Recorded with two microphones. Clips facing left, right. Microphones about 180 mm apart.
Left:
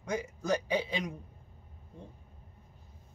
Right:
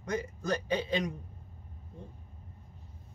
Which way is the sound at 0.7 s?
10° left (ahead or behind).